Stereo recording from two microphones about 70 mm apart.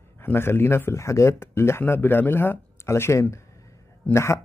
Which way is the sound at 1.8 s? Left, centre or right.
Left.